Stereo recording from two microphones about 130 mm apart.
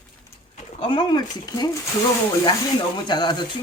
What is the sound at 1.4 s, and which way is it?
Speech, 30° left (ahead or behind).